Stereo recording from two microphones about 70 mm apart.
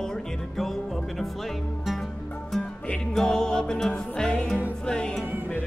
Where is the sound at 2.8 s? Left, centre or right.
Centre.